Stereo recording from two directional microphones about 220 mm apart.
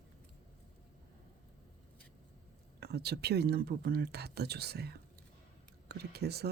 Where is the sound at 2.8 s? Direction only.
45° right (ahead or behind).